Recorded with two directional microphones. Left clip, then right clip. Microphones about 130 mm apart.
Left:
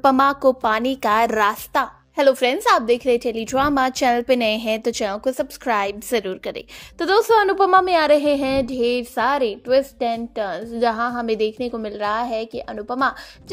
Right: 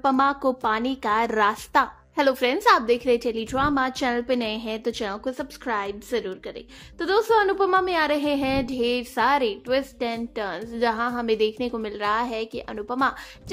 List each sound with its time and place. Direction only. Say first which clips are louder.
0.0 s a woman's voice: left 6 dB; 35° left (ahead or behind); by 3.4 s 20° left (ahead or behind)
3.5 s a woman's voice: left 5 dB; 30° left (ahead or behind)
5.7 s a woman's voice: left 6 dB; 40° left (ahead or behind); by 13.1 s 20° left (ahead or behind)